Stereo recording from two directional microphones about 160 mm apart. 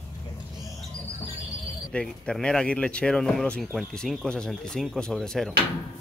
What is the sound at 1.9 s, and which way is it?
Speech, 5° left (ahead or behind).